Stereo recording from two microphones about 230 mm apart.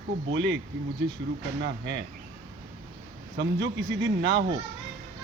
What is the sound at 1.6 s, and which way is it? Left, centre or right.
Speech, right.